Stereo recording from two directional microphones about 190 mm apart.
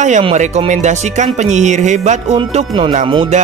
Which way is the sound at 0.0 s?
35° right (ahead or behind).